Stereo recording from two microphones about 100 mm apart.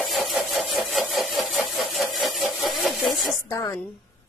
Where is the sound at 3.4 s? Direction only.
35° left (ahead or behind).